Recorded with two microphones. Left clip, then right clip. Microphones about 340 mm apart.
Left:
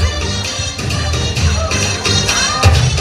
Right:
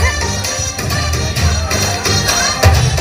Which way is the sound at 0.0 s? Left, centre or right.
Right.